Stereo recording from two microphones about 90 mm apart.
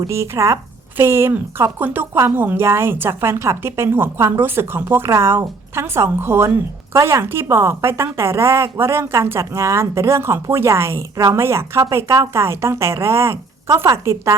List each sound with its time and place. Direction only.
0.1 s a woman's voice: 35° right (ahead or behind)